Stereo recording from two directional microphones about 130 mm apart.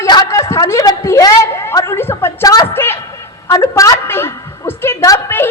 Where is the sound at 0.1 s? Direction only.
30° left (ahead or behind).